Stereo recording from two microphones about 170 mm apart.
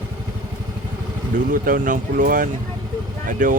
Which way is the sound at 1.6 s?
55° right (ahead or behind).